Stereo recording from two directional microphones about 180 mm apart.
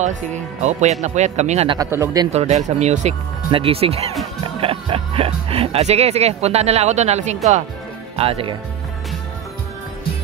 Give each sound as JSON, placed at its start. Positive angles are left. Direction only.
{"t": 0.0, "sound": "speech", "side_deg": -40}
{"t": 1.8, "sound": "speech", "side_deg": -15}
{"t": 2.3, "sound": "speech", "side_deg": -40}